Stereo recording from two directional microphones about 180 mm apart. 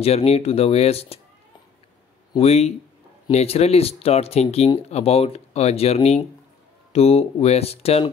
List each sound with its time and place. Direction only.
0.0 s speech: 35° left (ahead or behind)
2.3 s speech: 35° left (ahead or behind)